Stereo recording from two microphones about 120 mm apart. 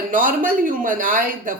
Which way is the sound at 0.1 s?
90° right.